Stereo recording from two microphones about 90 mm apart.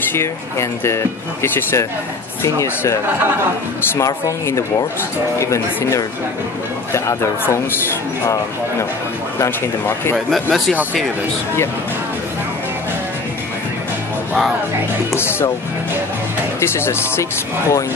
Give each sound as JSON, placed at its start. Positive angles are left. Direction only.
{"t": 0.1, "sound": "speech", "side_deg": 30}
{"t": 6.9, "sound": "speech", "side_deg": 30}
{"t": 9.4, "sound": "speech", "side_deg": 30}
{"t": 10.1, "sound": "speech", "side_deg": 0}
{"t": 15.1, "sound": "speech", "side_deg": 25}
{"t": 16.5, "sound": "speech", "side_deg": 30}